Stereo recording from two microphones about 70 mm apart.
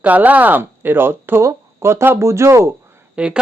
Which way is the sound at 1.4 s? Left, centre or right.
Right.